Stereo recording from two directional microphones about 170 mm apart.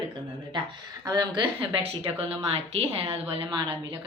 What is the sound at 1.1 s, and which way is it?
Speech, 25° right (ahead or behind).